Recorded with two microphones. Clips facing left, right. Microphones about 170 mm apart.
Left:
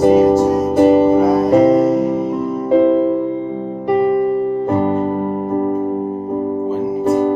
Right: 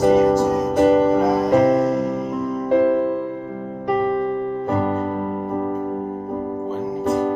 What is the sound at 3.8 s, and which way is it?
Music, 10° left (ahead or behind).